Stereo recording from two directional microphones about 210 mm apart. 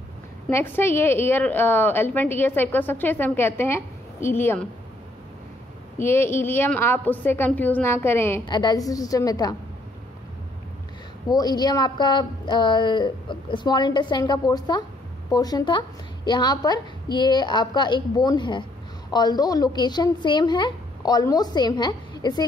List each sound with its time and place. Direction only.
0.5 s a woman's voice: 10° left (ahead or behind)
5.9 s a woman's voice: 10° left (ahead or behind)
11.2 s a woman's voice: 20° left (ahead or behind)